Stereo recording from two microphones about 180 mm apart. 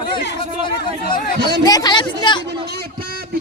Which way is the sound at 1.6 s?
20° left (ahead or behind).